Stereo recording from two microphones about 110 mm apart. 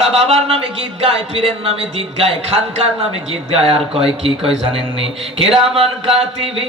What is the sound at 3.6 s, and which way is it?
Speech, 60° right (ahead or behind).